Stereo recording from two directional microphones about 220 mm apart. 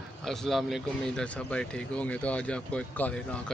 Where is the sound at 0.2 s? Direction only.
Centre (ahead or behind).